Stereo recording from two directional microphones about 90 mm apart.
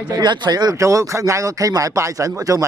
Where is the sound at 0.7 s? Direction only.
35° right (ahead or behind).